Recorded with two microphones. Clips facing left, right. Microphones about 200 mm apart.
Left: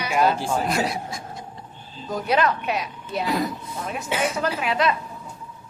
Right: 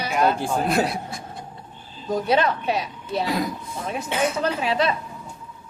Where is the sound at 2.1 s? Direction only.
25° right (ahead or behind).